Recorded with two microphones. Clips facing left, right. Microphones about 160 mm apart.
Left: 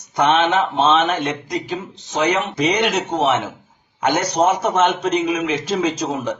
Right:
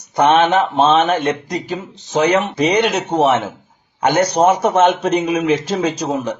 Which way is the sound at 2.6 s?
55° right (ahead or behind).